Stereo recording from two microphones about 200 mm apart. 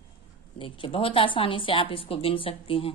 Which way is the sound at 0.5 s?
25° left (ahead or behind).